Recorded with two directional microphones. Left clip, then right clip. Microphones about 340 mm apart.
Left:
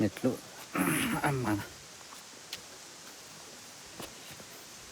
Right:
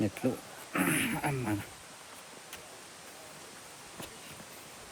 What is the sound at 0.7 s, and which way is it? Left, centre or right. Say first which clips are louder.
Speech: even; centre.